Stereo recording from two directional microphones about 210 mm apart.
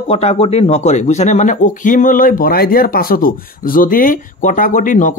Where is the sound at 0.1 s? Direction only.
30° left (ahead or behind).